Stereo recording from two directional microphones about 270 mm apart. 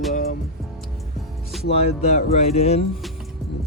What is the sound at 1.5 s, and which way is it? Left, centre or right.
Music, centre.